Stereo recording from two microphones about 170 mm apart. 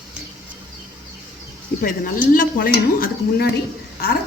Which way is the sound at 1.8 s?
55° left (ahead or behind).